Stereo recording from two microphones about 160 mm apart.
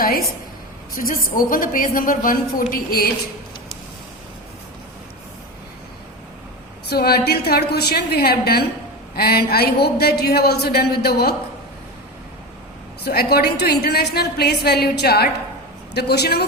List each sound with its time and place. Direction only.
0.0 s a woman's voice: 70° left (ahead or behind)
6.9 s a woman's voice: 75° left (ahead or behind)
13.1 s a woman's voice: 75° left (ahead or behind)